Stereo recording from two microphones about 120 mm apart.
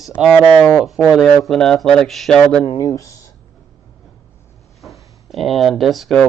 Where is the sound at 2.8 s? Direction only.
30° left (ahead or behind).